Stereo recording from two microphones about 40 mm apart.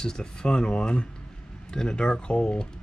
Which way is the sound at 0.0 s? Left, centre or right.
Centre.